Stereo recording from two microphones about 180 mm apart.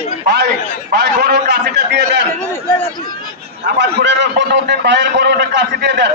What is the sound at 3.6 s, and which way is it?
A man's voice, 75° right (ahead or behind).